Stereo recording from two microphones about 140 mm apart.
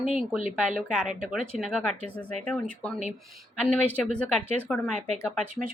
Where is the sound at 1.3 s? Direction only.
Centre (ahead or behind).